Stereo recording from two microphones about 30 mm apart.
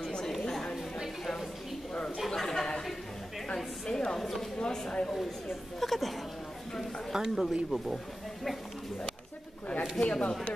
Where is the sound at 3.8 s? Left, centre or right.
Left.